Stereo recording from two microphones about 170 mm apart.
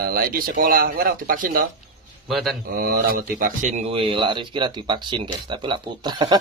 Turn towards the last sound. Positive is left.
turn(degrees=-25)  # may be behind; listen again after turning